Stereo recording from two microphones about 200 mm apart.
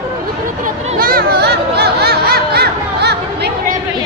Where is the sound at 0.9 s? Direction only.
50° right (ahead or behind).